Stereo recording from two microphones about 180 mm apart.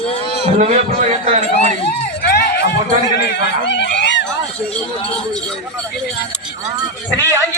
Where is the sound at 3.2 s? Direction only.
75° left (ahead or behind).